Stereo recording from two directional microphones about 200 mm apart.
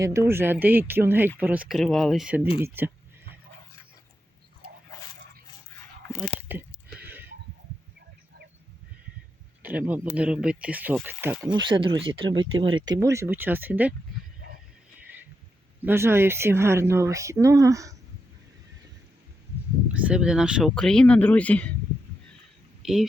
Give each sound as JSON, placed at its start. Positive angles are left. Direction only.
{"t": 0.0, "sound": "speech", "side_deg": -15}
{"t": 6.5, "sound": "speech", "side_deg": -10}
{"t": 7.0, "sound": "a sound", "side_deg": -10}
{"t": 9.6, "sound": "speech", "side_deg": -10}
{"t": 11.5, "sound": "speech", "side_deg": -25}
{"t": 15.0, "sound": "a sound", "side_deg": -10}
{"t": 15.8, "sound": "speech", "side_deg": -10}
{"t": 19.9, "sound": "speech", "side_deg": -5}
{"t": 22.8, "sound": "speech", "side_deg": 0}